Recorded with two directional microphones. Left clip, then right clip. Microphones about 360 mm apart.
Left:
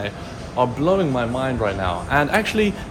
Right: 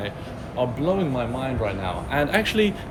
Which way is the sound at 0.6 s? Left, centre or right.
Centre.